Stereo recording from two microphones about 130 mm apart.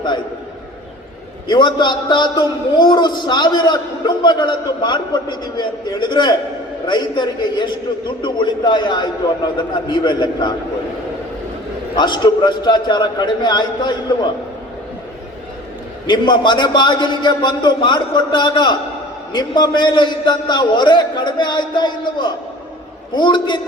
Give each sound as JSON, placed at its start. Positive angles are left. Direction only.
{"t": 1.5, "sound": "a man's voice", "side_deg": 35}
{"t": 11.9, "sound": "a man's voice", "side_deg": 35}
{"t": 16.0, "sound": "a man's voice", "side_deg": 35}